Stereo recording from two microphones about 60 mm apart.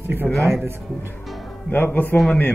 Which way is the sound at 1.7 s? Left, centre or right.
Left.